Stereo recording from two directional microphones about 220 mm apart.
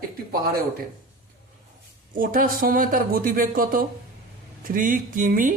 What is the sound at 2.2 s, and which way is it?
Speech, 40° right (ahead or behind).